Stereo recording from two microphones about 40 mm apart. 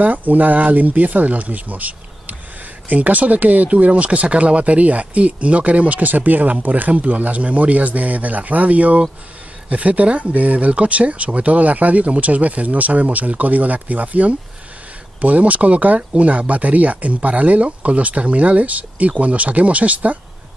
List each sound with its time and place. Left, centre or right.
0.0 s speech: right